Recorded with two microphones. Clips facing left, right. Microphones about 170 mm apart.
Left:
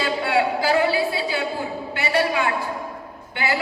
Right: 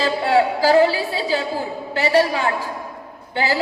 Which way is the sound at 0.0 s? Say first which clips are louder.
Right 4 dB; 35° right (ahead or behind).